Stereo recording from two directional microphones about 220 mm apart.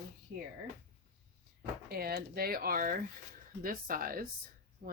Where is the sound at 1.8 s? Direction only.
45° right (ahead or behind).